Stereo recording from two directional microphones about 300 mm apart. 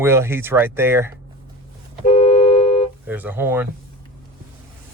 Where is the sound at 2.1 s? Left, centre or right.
Centre.